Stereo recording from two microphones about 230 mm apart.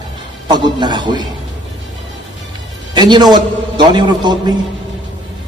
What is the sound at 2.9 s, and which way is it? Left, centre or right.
A man's voice, centre.